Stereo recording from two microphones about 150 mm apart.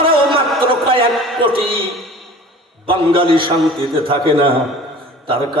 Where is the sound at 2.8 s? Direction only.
35° right (ahead or behind).